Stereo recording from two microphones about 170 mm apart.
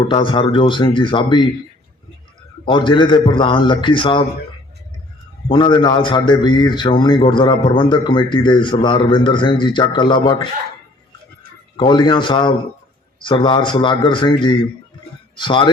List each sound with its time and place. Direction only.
0.0 s a man's voice: 30° left (ahead or behind)
2.6 s a man's voice: 30° left (ahead or behind)
5.5 s a man's voice: 30° left (ahead or behind)
11.8 s a man's voice: 25° left (ahead or behind)